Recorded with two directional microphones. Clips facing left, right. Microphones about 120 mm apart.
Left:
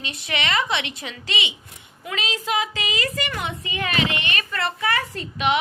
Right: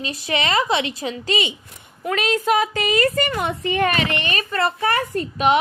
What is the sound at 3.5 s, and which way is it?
A woman's voice, 60° right (ahead or behind).